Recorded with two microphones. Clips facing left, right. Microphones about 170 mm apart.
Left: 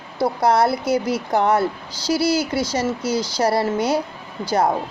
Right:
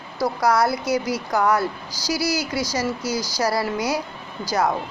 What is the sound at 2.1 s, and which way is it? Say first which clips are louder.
Speech: left 5 dB; 55° left (ahead or behind).